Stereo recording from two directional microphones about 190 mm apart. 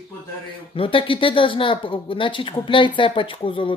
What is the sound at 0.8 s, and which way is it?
Speech, 25° left (ahead or behind).